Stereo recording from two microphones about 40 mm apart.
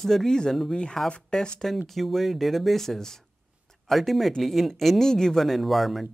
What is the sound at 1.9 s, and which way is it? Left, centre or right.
Speech, centre.